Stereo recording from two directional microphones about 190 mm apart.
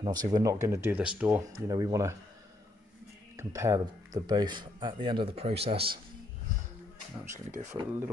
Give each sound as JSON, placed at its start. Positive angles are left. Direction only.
{"t": 0.0, "sound": "speech", "side_deg": -20}
{"t": 1.7, "sound": "speech", "side_deg": -20}
{"t": 3.3, "sound": "speech", "side_deg": -15}
{"t": 7.8, "sound": "speech", "side_deg": -15}